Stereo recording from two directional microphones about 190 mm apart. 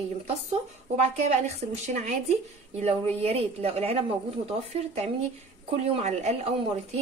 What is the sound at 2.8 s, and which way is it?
A woman's voice, 30° right (ahead or behind).